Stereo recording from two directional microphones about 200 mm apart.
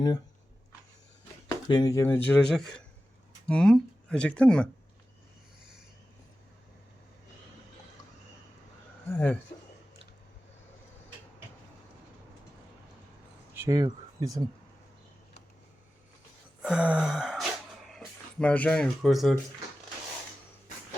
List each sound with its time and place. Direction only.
1.5 s speech: 20° left (ahead or behind)
9.0 s speech: 10° left (ahead or behind)
13.6 s speech: 15° right (ahead or behind)
16.6 s speech: 5° right (ahead or behind)